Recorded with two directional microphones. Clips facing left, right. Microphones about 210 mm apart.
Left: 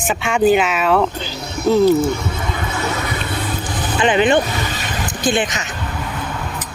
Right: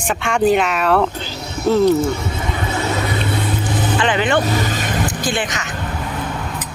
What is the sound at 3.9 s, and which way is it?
Speech, 20° left (ahead or behind).